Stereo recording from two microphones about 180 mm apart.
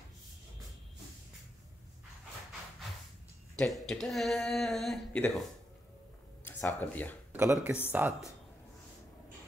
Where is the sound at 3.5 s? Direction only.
5° left (ahead or behind).